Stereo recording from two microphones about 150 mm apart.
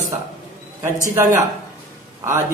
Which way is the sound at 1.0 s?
20° right (ahead or behind).